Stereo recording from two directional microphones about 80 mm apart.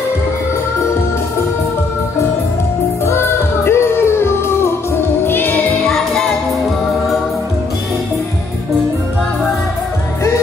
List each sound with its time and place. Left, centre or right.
3.1 s music: left
5.9 s music: centre